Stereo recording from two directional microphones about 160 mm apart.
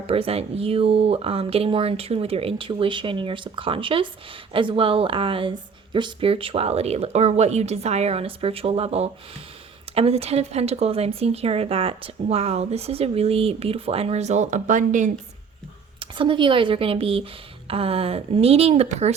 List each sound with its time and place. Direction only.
0.1 s speech: 35° right (ahead or behind)
16.0 s speech: 30° right (ahead or behind)